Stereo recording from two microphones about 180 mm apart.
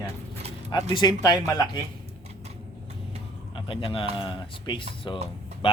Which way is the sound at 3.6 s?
30° left (ahead or behind).